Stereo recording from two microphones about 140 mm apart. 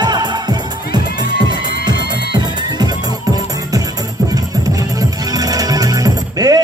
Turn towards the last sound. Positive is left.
turn(degrees=-25)  # may be behind; listen again after turning